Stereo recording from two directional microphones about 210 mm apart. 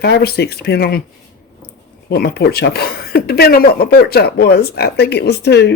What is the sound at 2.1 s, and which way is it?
Speech, 50° left (ahead or behind).